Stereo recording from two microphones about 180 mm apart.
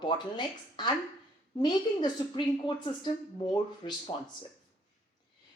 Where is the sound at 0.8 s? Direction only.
25° left (ahead or behind).